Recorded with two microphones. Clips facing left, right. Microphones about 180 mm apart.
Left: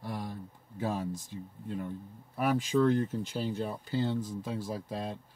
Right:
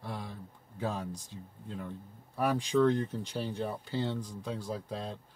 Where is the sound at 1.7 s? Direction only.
5° left (ahead or behind).